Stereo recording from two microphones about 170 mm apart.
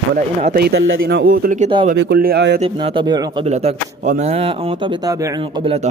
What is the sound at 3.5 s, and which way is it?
Speech, 40° right (ahead or behind).